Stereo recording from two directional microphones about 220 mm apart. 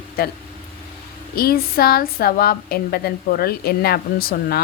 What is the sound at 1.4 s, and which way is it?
A woman's voice, 45° left (ahead or behind).